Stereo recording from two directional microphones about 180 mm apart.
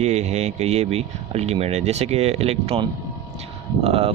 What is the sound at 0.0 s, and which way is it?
Speech, 35° right (ahead or behind).